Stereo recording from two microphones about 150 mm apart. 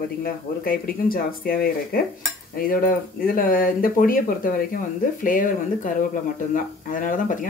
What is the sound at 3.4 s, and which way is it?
Speech, 70° left (ahead or behind).